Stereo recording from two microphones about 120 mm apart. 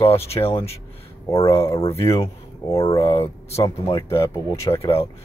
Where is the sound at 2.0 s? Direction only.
25° left (ahead or behind).